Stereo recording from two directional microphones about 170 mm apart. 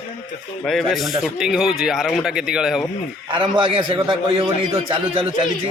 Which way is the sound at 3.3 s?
30° right (ahead or behind).